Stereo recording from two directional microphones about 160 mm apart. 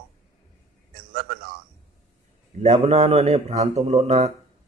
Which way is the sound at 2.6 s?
40° right (ahead or behind).